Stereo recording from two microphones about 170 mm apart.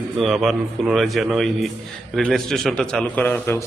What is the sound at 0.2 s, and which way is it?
A man's voice, centre (ahead or behind).